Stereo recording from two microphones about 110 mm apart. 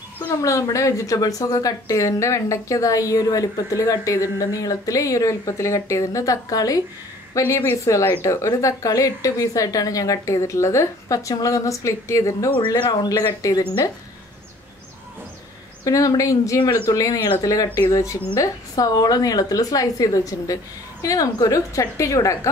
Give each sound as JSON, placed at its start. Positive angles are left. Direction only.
{"t": 0.4, "sound": "a woman's voice", "side_deg": 30}
{"t": 12.5, "sound": "speech", "side_deg": 50}
{"t": 15.8, "sound": "a woman's voice", "side_deg": 30}